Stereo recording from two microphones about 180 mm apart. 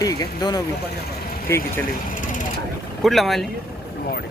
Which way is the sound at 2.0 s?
45° left (ahead or behind).